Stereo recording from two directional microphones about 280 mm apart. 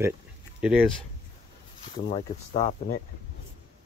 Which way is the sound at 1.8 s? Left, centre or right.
Centre.